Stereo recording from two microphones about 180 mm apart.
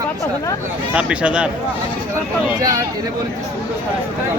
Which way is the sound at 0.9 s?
5° right (ahead or behind).